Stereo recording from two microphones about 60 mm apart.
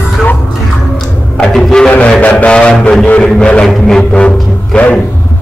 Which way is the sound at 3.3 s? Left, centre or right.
Centre.